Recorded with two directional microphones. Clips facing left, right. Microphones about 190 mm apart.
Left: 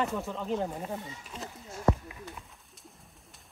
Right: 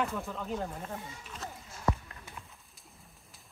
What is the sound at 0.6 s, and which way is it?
Speech, 15° left (ahead or behind).